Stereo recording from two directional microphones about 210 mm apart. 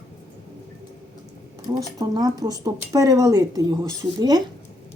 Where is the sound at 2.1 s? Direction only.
20° right (ahead or behind).